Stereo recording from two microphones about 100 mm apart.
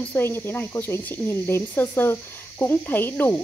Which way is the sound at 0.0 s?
20° left (ahead or behind).